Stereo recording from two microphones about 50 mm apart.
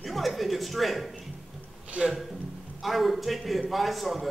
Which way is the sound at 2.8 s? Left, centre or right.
Centre.